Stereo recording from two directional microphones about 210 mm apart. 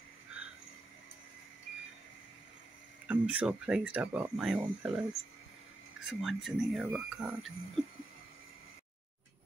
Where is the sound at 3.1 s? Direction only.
5° right (ahead or behind).